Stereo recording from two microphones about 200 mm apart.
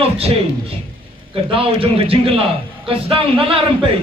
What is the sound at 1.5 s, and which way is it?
A man's voice, 25° right (ahead or behind).